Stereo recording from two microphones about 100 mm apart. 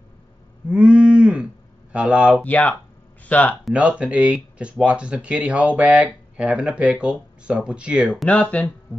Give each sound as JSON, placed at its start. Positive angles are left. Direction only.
{"t": 0.7, "sound": "cattle", "side_deg": -10}
{"t": 2.4, "sound": "speech", "side_deg": 15}
{"t": 3.7, "sound": "speech", "side_deg": -10}
{"t": 8.3, "sound": "speech", "side_deg": 15}